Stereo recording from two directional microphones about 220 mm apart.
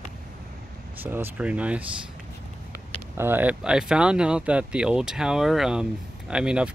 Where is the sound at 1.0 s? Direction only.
10° right (ahead or behind).